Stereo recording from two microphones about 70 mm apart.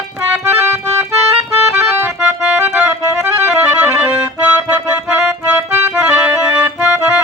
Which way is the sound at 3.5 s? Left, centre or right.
Right.